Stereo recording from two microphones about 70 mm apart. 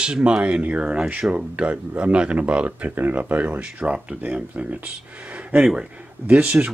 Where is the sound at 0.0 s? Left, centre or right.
Centre.